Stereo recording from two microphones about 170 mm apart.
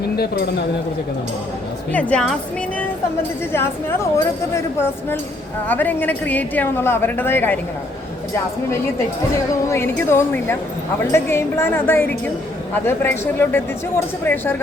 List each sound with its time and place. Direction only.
0.2 s speech: 70° left (ahead or behind)
1.9 s a woman's voice: 5° left (ahead or behind)
3.5 s a woman's voice: 15° left (ahead or behind)
9.6 s a woman's voice: 15° left (ahead or behind)